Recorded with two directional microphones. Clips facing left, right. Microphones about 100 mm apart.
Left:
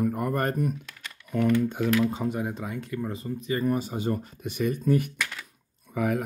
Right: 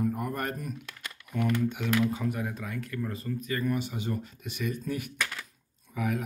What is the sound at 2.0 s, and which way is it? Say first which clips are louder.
Speech: left 3 dB; 30° left (ahead or behind).